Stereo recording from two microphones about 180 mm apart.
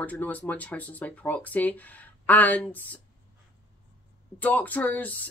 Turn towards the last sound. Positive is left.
turn(degrees=10)  # may be behind; listen again after turning